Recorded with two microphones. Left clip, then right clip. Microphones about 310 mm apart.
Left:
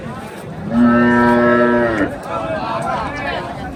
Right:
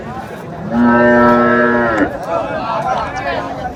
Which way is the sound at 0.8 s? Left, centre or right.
Right.